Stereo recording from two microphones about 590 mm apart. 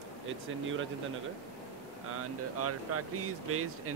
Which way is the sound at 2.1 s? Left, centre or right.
Right.